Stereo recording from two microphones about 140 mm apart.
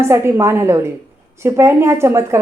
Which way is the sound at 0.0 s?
20° right (ahead or behind).